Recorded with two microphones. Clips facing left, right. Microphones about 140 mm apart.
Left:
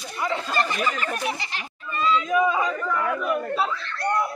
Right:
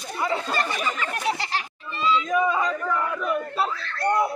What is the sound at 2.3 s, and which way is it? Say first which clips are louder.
Speech: left 1 dB; 5° left (ahead or behind).